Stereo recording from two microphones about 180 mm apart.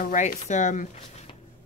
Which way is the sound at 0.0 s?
50° left (ahead or behind).